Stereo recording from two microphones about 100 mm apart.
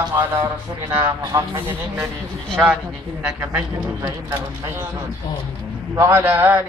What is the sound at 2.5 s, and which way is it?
A man's voice, centre (ahead or behind).